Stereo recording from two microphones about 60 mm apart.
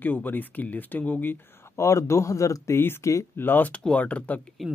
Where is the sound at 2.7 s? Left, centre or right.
Left.